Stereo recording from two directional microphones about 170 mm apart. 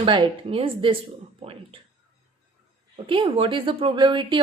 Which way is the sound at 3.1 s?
30° right (ahead or behind).